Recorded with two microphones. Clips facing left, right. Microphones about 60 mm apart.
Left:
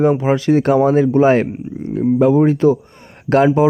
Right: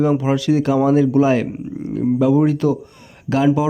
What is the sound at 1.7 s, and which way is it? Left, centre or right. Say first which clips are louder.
Speech: left 1 dB; centre.